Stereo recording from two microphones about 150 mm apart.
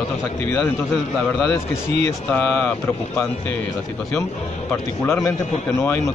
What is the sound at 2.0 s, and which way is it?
Speech, 10° left (ahead or behind).